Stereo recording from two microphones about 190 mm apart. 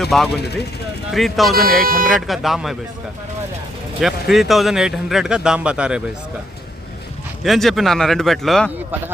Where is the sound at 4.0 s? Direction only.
Centre (ahead or behind).